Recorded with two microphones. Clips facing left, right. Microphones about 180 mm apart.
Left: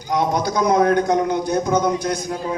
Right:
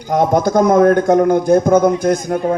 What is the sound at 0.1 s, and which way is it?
Speech, 50° right (ahead or behind).